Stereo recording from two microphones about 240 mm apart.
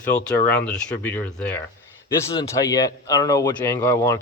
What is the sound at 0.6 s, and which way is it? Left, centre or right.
Speech, centre.